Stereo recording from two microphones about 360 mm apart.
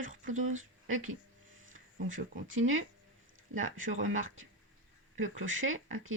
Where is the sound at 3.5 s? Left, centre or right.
Right.